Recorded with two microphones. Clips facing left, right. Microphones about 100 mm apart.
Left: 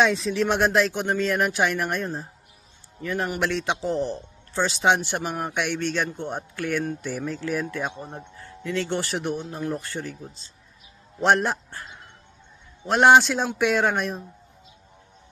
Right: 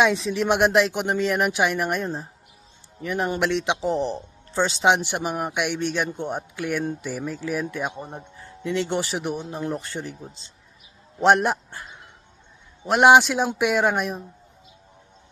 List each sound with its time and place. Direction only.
0.0 s a man's voice: 15° right (ahead or behind)